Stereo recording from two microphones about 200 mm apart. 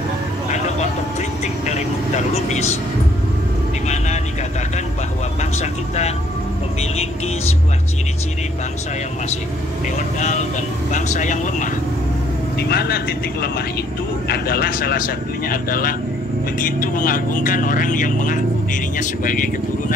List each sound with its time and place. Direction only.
1.7 s speech: 35° left (ahead or behind)
3.8 s vehicle: 35° left (ahead or behind)
5.4 s speech: 35° left (ahead or behind)
9.9 s speech: 35° left (ahead or behind)
12.5 s speech: 50° left (ahead or behind)